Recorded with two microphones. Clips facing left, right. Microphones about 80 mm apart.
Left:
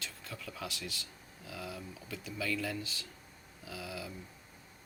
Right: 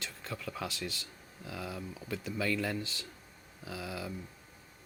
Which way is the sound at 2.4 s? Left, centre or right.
Right.